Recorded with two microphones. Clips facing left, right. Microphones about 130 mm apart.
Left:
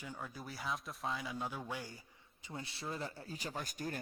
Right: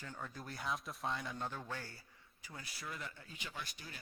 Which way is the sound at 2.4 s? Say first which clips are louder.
Left 5 dB; 25° left (ahead or behind).